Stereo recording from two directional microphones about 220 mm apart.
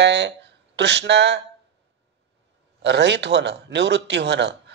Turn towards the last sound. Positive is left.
turn(degrees=-50)  # may be behind; listen again after turning